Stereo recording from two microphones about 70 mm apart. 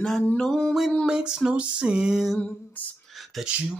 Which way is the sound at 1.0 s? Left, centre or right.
Centre.